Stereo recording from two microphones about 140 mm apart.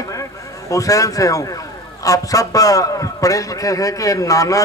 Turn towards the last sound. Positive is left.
turn(degrees=25)  # may be behind; listen again after turning